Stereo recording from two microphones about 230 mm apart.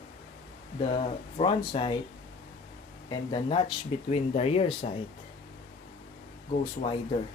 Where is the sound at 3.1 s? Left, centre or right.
Left.